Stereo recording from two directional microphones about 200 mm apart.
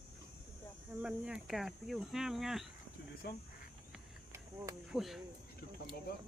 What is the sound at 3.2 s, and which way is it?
Speech, 55° left (ahead or behind).